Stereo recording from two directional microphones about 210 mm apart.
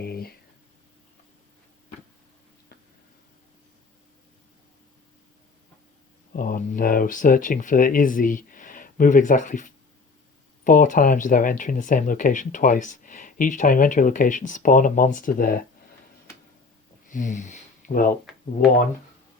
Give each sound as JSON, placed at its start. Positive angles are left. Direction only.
{"t": 0.0, "sound": "a sound", "side_deg": 45}
{"t": 6.3, "sound": "speech", "side_deg": 40}
{"t": 17.1, "sound": "speech", "side_deg": 35}